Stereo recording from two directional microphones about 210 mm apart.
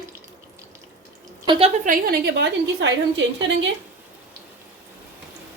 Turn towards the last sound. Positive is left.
turn(degrees=-60)  # may be behind; listen again after turning